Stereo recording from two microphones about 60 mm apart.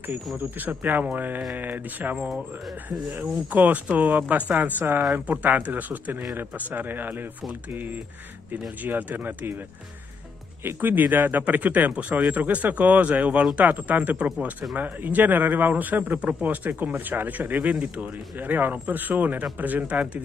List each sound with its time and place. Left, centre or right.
0.6 s speech: right
3.2 s speech: right
10.6 s speech: right